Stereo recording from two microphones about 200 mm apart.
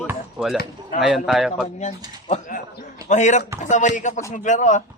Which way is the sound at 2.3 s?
40° left (ahead or behind).